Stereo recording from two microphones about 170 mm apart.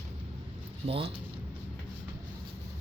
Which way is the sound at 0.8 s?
35° right (ahead or behind).